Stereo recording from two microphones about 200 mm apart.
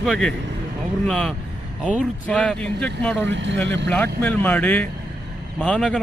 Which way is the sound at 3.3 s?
65° right (ahead or behind).